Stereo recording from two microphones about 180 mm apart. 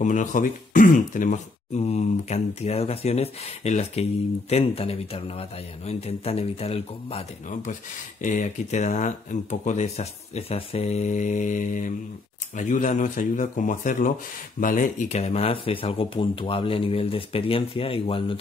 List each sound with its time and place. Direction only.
0.0 s speech: 45° left (ahead or behind)